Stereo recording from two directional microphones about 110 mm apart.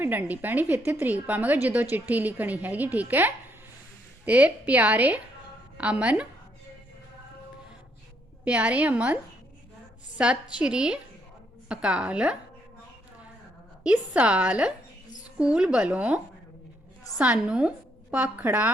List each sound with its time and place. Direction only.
0.0 s a woman's voice: 20° right (ahead or behind)
8.4 s speech: 10° right (ahead or behind)
10.2 s speech: 10° right (ahead or behind)
13.8 s a woman's voice: 10° right (ahead or behind)